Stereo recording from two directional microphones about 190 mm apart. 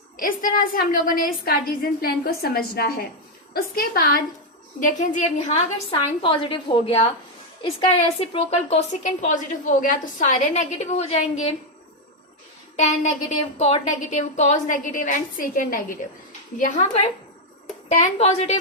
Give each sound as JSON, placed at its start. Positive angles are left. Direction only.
{"t": 0.2, "sound": "a woman's voice", "side_deg": 45}
{"t": 5.9, "sound": "a woman's voice", "side_deg": 25}
{"t": 13.6, "sound": "a woman's voice", "side_deg": 35}